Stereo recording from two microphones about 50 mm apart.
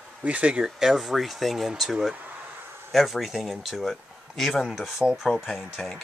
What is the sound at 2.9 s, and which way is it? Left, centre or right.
Speech, centre.